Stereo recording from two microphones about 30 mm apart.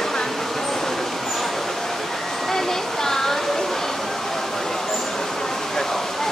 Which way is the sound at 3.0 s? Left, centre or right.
Centre.